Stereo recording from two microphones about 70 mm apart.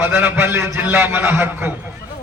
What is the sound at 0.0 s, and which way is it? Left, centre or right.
A man's voice, right.